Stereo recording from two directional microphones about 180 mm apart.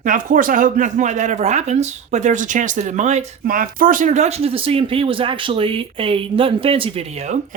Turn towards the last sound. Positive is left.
turn(degrees=-35)  # may be behind; listen again after turning